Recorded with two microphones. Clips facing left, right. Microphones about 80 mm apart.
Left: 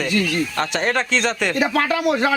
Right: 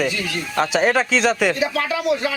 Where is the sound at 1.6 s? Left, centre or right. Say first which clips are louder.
Left 2 dB; left.